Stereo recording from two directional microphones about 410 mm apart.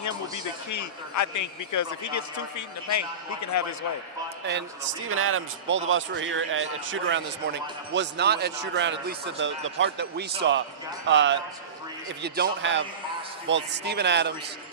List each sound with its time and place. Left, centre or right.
0.0 s a man's voice: left
5.0 s a man's voice: right